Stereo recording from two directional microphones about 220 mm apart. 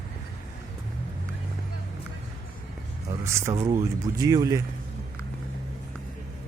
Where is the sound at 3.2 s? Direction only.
15° right (ahead or behind).